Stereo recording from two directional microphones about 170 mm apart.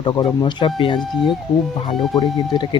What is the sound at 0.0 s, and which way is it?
Speech, 25° left (ahead or behind).